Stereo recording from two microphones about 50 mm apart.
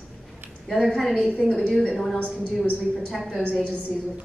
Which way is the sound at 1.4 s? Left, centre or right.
Centre.